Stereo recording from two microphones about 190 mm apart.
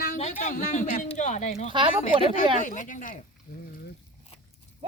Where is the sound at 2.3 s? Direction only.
40° left (ahead or behind).